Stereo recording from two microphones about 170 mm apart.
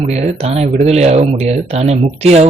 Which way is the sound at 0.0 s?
40° right (ahead or behind).